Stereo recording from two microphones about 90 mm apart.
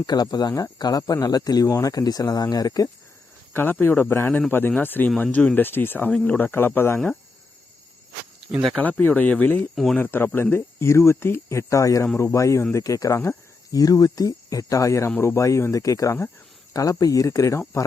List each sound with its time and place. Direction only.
0.0 s speech: 45° left (ahead or behind)
3.5 s speech: 25° left (ahead or behind)
8.8 s speech: 20° left (ahead or behind); by 17.8 s 35° left (ahead or behind)